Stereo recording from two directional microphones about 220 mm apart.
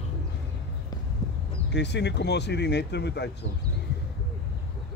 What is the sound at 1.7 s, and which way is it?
Speech, 50° left (ahead or behind).